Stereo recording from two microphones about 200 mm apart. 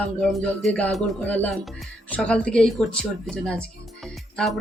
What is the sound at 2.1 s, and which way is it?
Speech, 5° left (ahead or behind).